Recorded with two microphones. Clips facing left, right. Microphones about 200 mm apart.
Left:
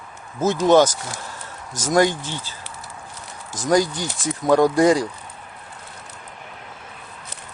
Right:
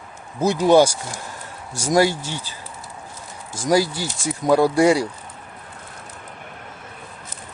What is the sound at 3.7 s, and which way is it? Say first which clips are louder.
Speech: even; 5° right (ahead or behind).